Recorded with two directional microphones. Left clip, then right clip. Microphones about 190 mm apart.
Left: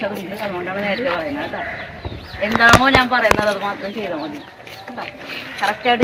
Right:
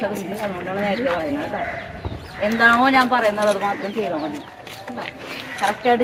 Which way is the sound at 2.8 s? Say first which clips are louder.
Left 2 dB; 30° right (ahead or behind).